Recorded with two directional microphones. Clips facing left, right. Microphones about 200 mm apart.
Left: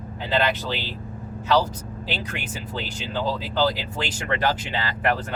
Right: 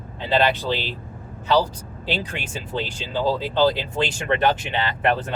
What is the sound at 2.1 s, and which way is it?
Speech, 30° right (ahead or behind).